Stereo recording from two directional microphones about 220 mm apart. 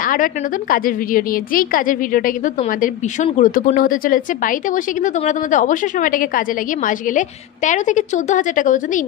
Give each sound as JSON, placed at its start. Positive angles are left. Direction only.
{"t": 0.0, "sound": "a woman's voice", "side_deg": 40}